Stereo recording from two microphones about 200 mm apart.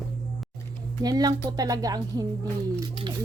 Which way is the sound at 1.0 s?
20° right (ahead or behind).